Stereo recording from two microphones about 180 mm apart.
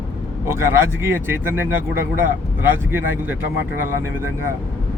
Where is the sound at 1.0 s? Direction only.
10° right (ahead or behind).